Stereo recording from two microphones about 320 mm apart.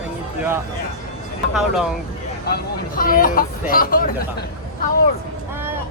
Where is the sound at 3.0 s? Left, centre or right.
Left.